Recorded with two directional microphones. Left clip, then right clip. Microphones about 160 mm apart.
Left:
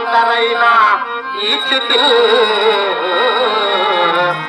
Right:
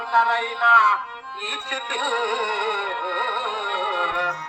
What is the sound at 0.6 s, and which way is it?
Music, 35° right (ahead or behind).